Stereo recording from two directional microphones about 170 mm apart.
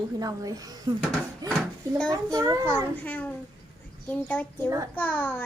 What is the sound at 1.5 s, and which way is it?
Dishes, 5° left (ahead or behind).